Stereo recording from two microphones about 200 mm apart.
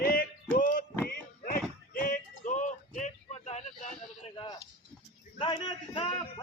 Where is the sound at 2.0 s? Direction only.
40° left (ahead or behind).